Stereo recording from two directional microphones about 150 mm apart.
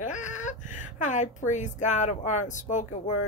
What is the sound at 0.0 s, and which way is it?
A woman's voice, 55° left (ahead or behind).